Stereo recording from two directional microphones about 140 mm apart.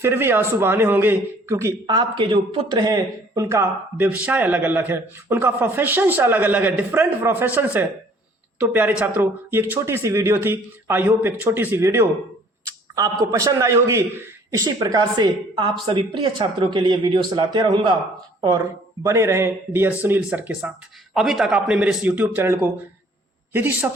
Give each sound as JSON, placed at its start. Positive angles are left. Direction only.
{"t": 0.0, "sound": "speech", "side_deg": -15}
{"t": 2.7, "sound": "a man's voice", "side_deg": -25}